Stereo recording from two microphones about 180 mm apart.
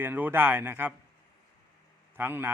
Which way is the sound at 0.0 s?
10° right (ahead or behind).